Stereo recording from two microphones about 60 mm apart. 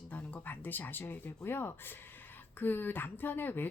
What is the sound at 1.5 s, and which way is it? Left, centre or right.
Speech, left.